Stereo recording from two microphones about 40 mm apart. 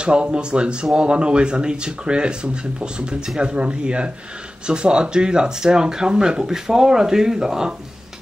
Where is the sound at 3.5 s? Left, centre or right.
Right.